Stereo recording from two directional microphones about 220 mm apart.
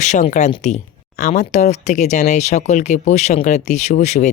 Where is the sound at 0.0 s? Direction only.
30° left (ahead or behind).